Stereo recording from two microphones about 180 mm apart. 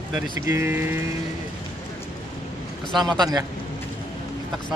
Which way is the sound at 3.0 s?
20° right (ahead or behind).